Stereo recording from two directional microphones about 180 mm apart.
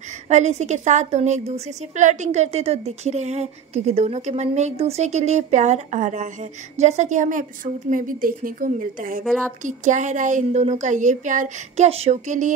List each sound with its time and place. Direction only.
0.3 s a woman's voice: 40° right (ahead or behind)
9.2 s a woman's voice: centre (ahead or behind)
9.6 s a woman's voice: 45° right (ahead or behind)